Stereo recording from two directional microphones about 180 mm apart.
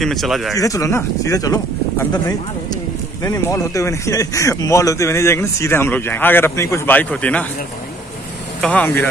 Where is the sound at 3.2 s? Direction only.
20° left (ahead or behind).